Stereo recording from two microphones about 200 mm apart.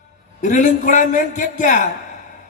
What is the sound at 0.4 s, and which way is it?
Speech, 40° left (ahead or behind).